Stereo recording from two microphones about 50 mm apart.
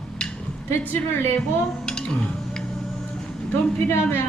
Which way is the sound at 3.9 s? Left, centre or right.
Left.